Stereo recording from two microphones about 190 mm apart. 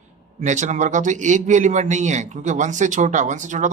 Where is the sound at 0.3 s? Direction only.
40° right (ahead or behind).